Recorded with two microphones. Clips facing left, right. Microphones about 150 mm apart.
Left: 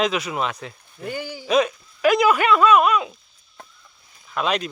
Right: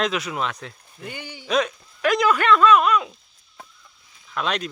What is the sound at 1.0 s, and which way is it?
Speech, 45° left (ahead or behind).